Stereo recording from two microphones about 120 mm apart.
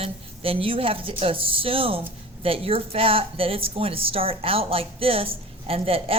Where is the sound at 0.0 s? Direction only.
50° right (ahead or behind).